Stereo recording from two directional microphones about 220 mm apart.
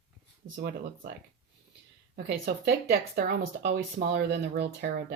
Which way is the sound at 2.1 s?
40° right (ahead or behind).